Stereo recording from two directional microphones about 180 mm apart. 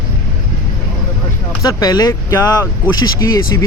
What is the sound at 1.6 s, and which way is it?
Speech, 20° left (ahead or behind).